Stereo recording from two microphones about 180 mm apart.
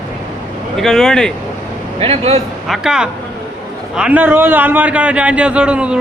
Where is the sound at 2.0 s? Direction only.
35° right (ahead or behind).